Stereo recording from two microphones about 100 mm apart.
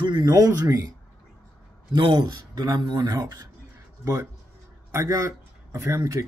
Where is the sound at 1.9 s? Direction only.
50° right (ahead or behind).